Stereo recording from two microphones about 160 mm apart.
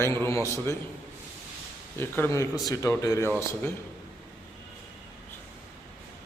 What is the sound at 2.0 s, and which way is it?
A man's voice, 15° left (ahead or behind).